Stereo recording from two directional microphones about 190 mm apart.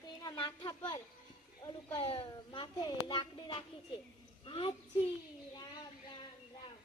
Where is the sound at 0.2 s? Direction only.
20° left (ahead or behind).